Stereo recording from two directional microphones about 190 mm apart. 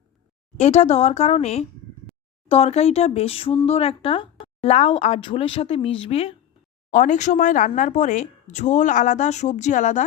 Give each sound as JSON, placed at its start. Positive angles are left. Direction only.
{"t": 0.5, "sound": "speech", "side_deg": 35}
{"t": 6.9, "sound": "speech", "side_deg": 40}